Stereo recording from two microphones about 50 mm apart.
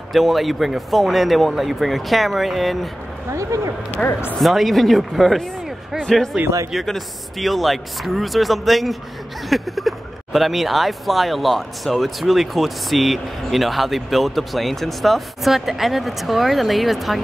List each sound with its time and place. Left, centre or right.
0.1 s speech: centre
3.3 s speech: right
4.4 s a man's voice: centre